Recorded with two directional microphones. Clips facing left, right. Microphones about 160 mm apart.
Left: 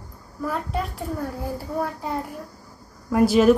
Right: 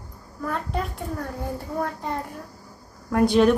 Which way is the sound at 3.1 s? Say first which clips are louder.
Left 2 dB; 5° left (ahead or behind).